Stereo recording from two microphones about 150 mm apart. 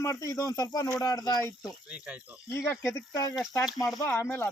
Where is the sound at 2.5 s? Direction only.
15° left (ahead or behind).